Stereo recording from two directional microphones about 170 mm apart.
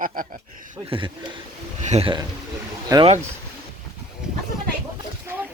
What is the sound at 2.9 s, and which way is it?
Speech, 20° right (ahead or behind).